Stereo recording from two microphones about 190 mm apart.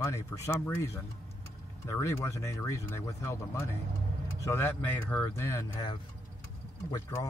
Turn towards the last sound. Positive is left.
turn(degrees=20)  # may be behind; listen again after turning